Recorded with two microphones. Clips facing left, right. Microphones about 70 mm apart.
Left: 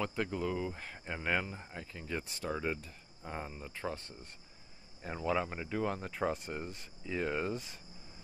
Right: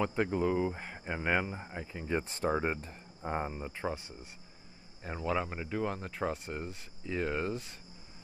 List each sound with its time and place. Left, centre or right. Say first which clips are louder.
0.0 s speech: right 5 dB; right; by 7.7 s centre